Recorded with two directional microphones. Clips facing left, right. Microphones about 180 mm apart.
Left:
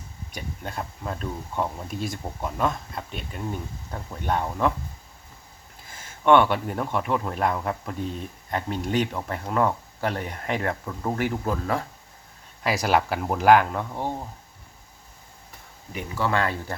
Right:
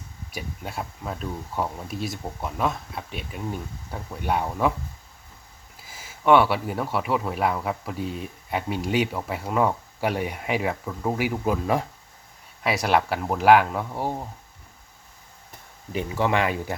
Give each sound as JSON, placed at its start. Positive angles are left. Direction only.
{"t": 0.3, "sound": "speech", "side_deg": -5}
{"t": 5.8, "sound": "speech", "side_deg": -5}
{"t": 12.6, "sound": "speech", "side_deg": 0}
{"t": 16.0, "sound": "speech", "side_deg": -20}